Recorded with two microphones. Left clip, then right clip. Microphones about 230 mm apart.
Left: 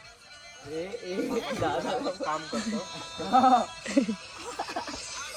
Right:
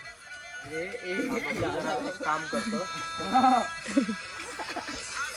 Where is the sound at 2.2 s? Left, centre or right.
Right.